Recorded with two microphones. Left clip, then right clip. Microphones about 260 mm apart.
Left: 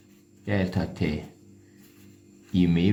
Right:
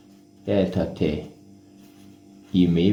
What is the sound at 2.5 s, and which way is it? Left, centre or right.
Speech, left.